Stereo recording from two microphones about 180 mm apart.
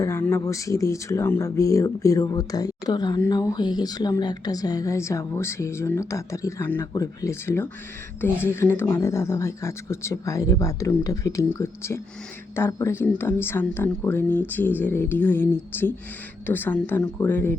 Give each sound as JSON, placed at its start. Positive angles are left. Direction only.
{"t": 0.0, "sound": "speech", "side_deg": 15}